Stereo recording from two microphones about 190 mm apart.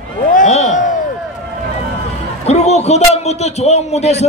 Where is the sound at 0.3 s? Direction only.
40° left (ahead or behind).